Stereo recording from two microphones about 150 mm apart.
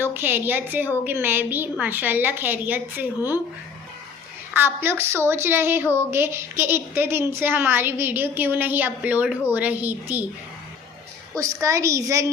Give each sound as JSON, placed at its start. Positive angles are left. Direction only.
{"t": 0.0, "sound": "a woman's voice", "side_deg": -15}
{"t": 4.5, "sound": "a woman's voice", "side_deg": -15}
{"t": 11.3, "sound": "a woman's voice", "side_deg": -20}